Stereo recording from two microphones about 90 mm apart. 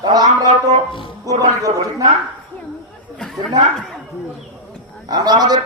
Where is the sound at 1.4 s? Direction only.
40° right (ahead or behind).